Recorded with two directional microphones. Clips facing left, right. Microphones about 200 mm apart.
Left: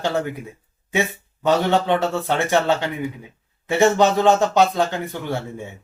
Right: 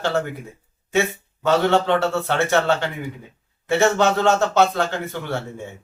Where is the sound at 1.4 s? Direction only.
15° left (ahead or behind).